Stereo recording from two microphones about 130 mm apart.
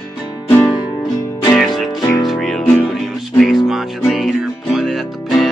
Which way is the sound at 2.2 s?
Centre (ahead or behind).